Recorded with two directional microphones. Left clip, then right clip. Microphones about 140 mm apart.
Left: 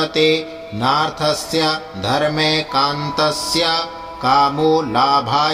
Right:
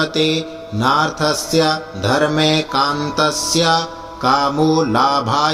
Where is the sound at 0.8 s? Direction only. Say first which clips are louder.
Right 1 dB; 15° right (ahead or behind).